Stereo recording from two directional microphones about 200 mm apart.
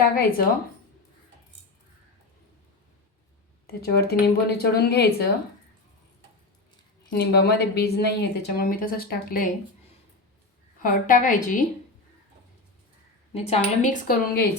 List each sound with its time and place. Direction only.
0.0 s speech: 45° left (ahead or behind)
3.8 s speech: 50° left (ahead or behind)
7.1 s speech: 55° left (ahead or behind)
10.8 s a woman's voice: 40° left (ahead or behind)
13.3 s a woman's voice: 30° left (ahead or behind)